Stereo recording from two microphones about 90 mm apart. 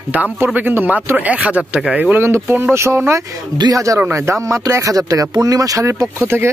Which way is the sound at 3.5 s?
45° right (ahead or behind).